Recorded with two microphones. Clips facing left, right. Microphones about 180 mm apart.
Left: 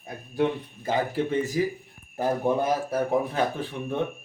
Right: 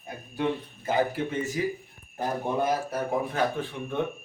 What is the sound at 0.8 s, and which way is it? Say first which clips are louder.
Speech: left 1 dB; 30° left (ahead or behind).